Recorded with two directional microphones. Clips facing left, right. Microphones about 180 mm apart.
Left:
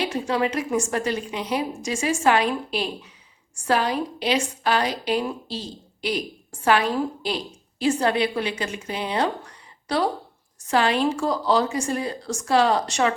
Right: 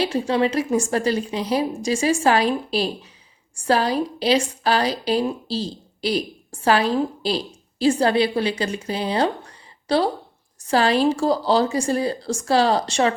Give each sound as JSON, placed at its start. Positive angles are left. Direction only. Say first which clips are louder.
{"t": 0.0, "sound": "a woman's voice", "louder": "right 3 dB", "side_deg": -30}